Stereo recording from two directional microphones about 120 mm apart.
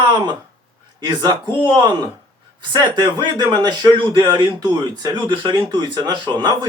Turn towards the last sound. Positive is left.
turn(degrees=-40)  # may be behind; listen again after turning